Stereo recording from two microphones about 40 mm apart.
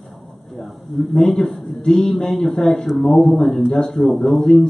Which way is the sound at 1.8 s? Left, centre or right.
Centre.